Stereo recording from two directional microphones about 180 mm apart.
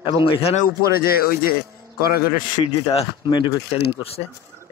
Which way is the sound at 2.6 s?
25° left (ahead or behind).